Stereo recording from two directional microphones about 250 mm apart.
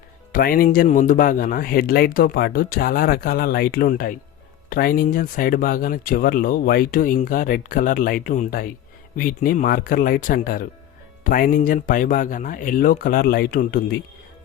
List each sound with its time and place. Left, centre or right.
0.3 s speech: left